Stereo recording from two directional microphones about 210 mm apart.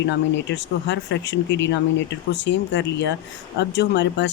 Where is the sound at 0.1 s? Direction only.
55° left (ahead or behind).